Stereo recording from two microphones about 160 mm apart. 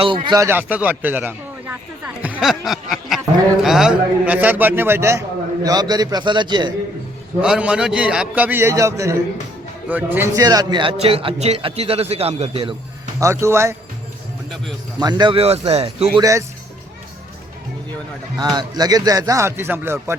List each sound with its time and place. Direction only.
0.3 s a man's voice: 20° right (ahead or behind)
7.4 s a man's voice: 5° right (ahead or behind)
10.4 s speech: 25° right (ahead or behind); by 12.7 s 40° right (ahead or behind)
13.1 s a man's voice: 20° right (ahead or behind)
14.9 s speech: 25° right (ahead or behind)
18.3 s speech: 25° right (ahead or behind)